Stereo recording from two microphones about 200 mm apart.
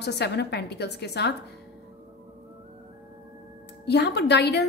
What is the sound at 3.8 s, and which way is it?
Speech, 55° left (ahead or behind).